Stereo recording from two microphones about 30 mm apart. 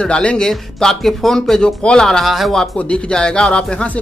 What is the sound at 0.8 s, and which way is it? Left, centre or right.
Speech, centre.